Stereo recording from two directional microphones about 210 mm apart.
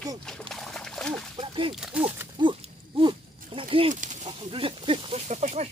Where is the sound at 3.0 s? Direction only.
25° right (ahead or behind).